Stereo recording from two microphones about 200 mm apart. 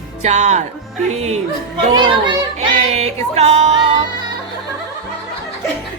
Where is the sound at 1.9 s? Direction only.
25° right (ahead or behind).